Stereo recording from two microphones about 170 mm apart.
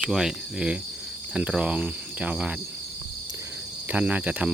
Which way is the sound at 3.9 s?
10° right (ahead or behind).